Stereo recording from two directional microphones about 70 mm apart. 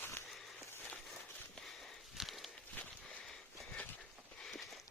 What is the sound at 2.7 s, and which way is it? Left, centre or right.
Sniff, left.